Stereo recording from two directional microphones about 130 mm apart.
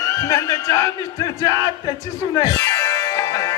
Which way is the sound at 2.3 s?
25° left (ahead or behind).